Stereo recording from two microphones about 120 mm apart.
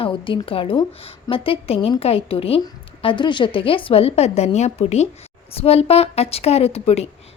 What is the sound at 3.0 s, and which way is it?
A woman's voice, 40° left (ahead or behind).